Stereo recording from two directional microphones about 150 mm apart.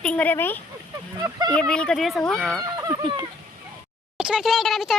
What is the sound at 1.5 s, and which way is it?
Speech, 5° left (ahead or behind).